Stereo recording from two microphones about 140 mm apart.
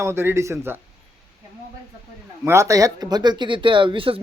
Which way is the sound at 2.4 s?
20° right (ahead or behind).